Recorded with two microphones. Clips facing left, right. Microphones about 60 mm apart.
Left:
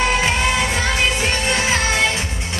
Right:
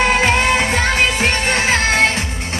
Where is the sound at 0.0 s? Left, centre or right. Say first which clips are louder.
Right 3 dB; right.